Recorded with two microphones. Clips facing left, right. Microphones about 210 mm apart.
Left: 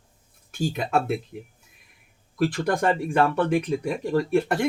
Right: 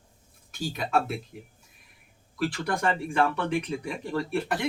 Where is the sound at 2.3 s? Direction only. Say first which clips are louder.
Left 5 dB; 45° left (ahead or behind).